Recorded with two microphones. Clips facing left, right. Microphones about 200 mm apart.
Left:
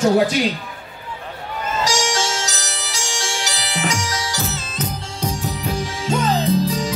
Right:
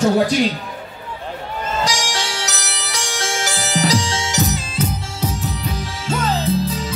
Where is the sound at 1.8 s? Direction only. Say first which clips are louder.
Left 4 dB; 60° right (ahead or behind); by 5.3 s 10° right (ahead or behind).